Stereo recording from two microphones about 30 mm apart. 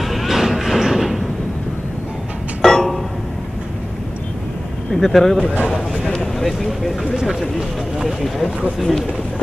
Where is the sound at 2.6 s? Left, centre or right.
Centre.